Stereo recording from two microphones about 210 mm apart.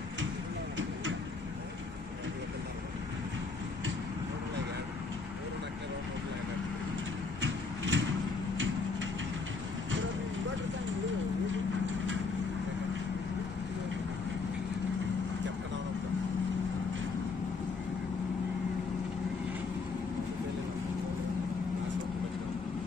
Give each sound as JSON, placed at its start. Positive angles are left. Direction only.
{"t": 7.4, "sound": "sliding door", "side_deg": -60}